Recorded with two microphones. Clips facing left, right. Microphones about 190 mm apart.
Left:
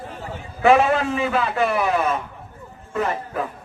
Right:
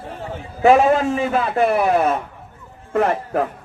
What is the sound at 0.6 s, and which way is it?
A man's voice, 40° right (ahead or behind).